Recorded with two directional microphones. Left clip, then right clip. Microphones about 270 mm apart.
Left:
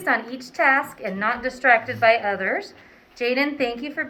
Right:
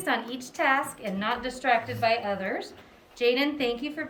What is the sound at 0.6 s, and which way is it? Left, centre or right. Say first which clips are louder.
A woman's voice: left 6 dB; centre.